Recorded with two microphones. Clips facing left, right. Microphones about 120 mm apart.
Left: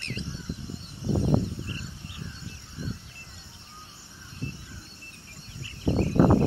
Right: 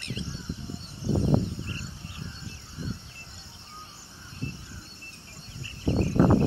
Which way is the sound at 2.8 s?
35° right (ahead or behind).